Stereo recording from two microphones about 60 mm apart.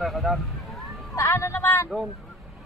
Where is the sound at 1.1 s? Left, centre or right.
Left.